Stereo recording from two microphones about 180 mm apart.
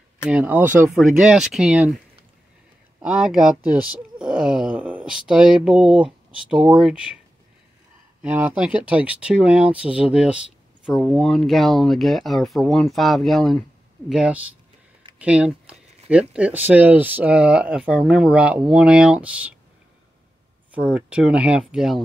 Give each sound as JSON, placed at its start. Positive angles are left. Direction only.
{"t": 0.3, "sound": "speech", "side_deg": -10}
{"t": 3.0, "sound": "speech", "side_deg": -5}
{"t": 4.4, "sound": "wail", "side_deg": -5}
{"t": 4.7, "sound": "speech", "side_deg": -10}
{"t": 8.2, "sound": "speech", "side_deg": -5}
{"t": 20.7, "sound": "speech", "side_deg": -5}